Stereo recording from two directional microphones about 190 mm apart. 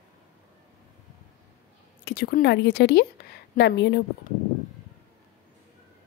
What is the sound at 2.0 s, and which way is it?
Speech, 55° left (ahead or behind).